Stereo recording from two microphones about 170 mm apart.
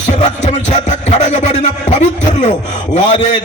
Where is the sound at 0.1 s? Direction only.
45° left (ahead or behind).